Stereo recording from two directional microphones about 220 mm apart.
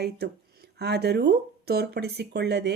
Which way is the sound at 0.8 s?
50° right (ahead or behind).